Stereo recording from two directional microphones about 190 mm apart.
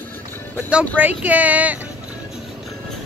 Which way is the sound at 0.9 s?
10° right (ahead or behind).